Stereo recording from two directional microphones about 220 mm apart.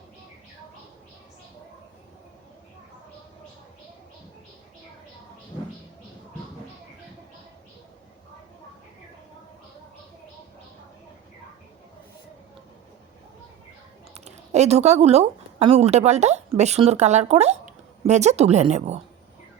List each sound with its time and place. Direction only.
14.1 s speech: 30° right (ahead or behind)